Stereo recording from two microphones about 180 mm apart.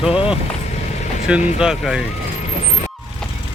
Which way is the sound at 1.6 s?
5° right (ahead or behind).